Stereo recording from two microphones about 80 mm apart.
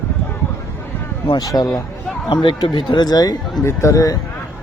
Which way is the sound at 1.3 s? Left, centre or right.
Left.